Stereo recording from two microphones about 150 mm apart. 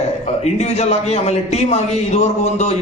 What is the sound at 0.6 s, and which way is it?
A man's voice, 45° left (ahead or behind).